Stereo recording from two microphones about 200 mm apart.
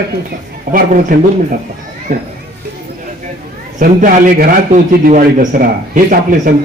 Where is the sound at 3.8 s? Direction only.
45° right (ahead or behind).